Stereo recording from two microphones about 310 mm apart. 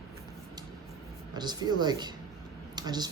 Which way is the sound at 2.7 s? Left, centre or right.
Centre.